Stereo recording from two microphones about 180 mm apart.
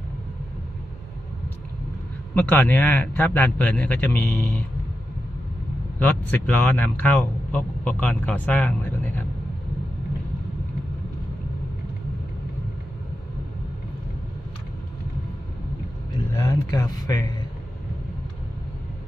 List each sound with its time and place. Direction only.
2.3 s a man's voice: 10° left (ahead or behind)
5.9 s a man's voice: 10° left (ahead or behind)
16.3 s speech: 20° left (ahead or behind)